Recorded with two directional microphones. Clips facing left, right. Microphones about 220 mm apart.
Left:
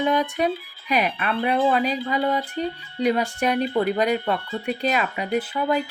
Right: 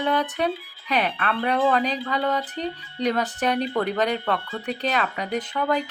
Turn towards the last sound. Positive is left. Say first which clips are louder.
# left 2 dB
turn(degrees=10)  # may be behind; listen again after turning